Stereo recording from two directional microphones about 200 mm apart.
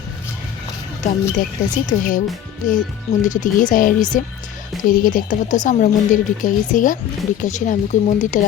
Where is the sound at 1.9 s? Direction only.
40° left (ahead or behind).